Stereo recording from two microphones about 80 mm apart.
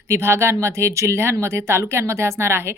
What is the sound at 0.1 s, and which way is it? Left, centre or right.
Speech, right.